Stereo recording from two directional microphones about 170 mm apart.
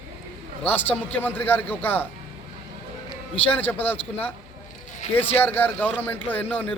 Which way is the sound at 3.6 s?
10° left (ahead or behind).